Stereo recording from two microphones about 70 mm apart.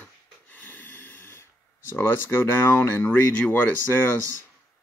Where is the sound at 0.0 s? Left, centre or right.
Left.